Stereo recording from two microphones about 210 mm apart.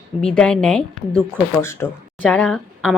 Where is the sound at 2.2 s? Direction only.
5° left (ahead or behind).